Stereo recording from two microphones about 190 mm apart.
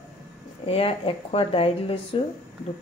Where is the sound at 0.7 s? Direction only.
30° left (ahead or behind).